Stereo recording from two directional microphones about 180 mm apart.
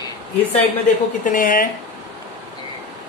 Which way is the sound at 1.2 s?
50° left (ahead or behind).